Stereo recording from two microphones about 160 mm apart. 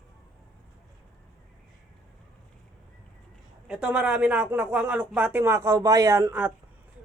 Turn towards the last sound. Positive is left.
turn(degrees=-20)  # may be behind; listen again after turning